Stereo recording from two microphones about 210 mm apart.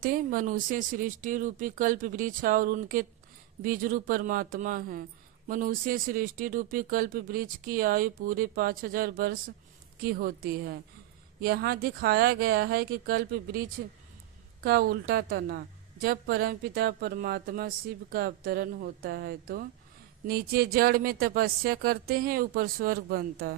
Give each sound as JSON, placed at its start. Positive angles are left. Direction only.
{"t": 0.0, "sound": "speech", "side_deg": -40}
{"t": 14.6, "sound": "speech", "side_deg": -45}